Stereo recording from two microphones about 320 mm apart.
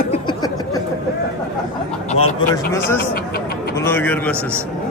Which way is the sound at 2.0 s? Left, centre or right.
Centre.